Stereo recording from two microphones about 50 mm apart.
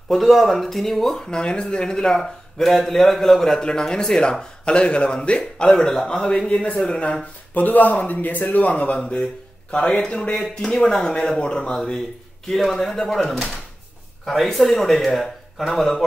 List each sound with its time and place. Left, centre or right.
0.1 s a man's voice: centre
1.3 s speech: centre
5.6 s speech: centre
7.5 s speech: left; by 12.0 s centre
12.4 s a man's voice: centre